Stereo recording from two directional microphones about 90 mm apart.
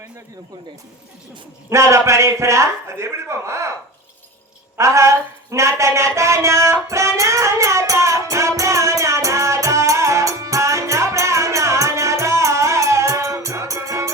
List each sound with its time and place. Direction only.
1.7 s a man's voice: 35° right (ahead or behind)
4.8 s speech: 35° right (ahead or behind)
6.8 s music: 35° right (ahead or behind)